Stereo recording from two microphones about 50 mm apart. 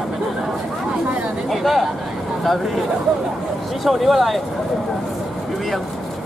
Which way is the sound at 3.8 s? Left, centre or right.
Centre.